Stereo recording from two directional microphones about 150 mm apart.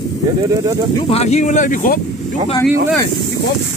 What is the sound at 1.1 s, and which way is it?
Speech, 45° left (ahead or behind).